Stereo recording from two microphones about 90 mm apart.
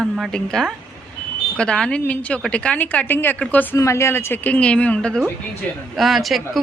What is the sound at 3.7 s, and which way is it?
A woman's voice, 35° left (ahead or behind).